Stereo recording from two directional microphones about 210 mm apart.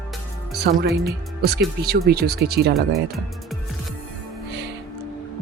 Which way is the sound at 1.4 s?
50° right (ahead or behind).